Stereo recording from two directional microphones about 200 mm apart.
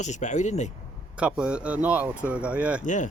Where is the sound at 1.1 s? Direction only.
5° right (ahead or behind).